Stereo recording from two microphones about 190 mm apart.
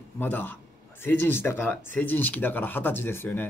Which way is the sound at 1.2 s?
10° left (ahead or behind).